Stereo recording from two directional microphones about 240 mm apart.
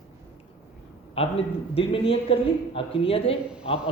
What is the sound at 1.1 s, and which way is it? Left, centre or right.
A man's voice, left.